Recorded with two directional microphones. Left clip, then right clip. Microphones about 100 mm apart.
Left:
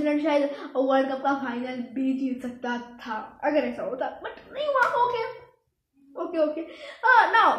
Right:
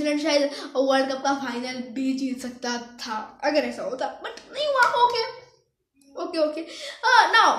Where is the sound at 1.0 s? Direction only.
20° right (ahead or behind).